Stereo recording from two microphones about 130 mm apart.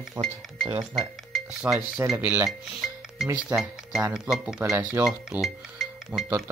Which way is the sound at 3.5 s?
20° right (ahead or behind).